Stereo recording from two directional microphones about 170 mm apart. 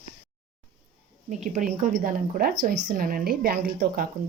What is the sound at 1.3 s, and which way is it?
A woman's voice, 45° right (ahead or behind).